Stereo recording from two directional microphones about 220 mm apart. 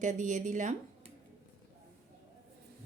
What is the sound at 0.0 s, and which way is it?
Speech, 35° right (ahead or behind).